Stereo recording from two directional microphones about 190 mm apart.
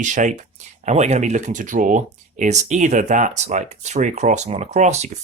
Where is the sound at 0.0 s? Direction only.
40° right (ahead or behind).